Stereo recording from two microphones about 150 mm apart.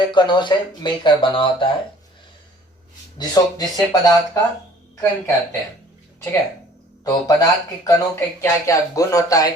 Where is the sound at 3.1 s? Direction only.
25° left (ahead or behind).